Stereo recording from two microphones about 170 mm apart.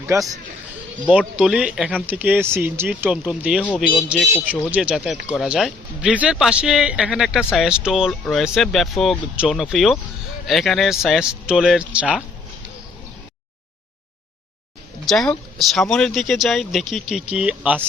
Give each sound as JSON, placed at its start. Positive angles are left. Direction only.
{"t": 0.1, "sound": "speech", "side_deg": -15}
{"t": 1.1, "sound": "a man's voice", "side_deg": -5}
{"t": 15.0, "sound": "a man's voice", "side_deg": 0}